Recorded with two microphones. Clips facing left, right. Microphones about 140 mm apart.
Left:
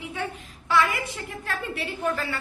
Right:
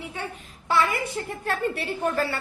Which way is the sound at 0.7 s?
40° right (ahead or behind).